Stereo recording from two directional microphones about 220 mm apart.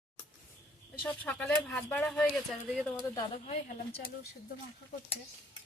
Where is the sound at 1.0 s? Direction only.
5° left (ahead or behind).